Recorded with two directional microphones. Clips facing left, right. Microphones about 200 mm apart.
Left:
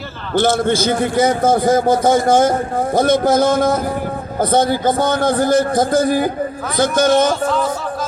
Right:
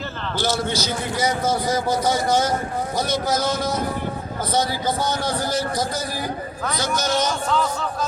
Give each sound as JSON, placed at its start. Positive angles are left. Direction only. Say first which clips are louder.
{"t": 0.3, "sound": "a man's voice", "louder": "left 9 dB", "side_deg": 55}